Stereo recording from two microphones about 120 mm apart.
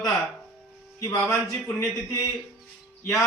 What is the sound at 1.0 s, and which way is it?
A man's voice, 25° left (ahead or behind).